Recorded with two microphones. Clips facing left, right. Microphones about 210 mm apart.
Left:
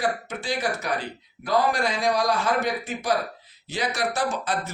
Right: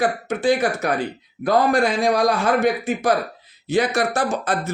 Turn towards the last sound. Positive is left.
turn(degrees=-50)  # may be behind; listen again after turning